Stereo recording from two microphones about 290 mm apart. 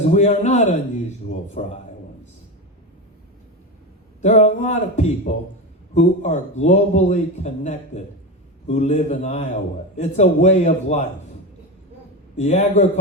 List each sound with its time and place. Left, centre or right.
0.1 s a man's voice: left
4.2 s a man's voice: left
12.4 s a man's voice: left